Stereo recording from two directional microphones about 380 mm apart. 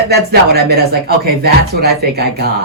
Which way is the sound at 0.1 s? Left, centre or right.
Right.